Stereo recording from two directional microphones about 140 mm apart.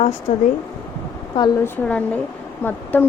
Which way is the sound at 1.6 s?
10° left (ahead or behind).